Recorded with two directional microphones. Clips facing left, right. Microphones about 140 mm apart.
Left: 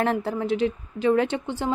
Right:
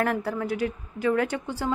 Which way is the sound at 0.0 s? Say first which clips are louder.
Left 2 dB; 25° left (ahead or behind).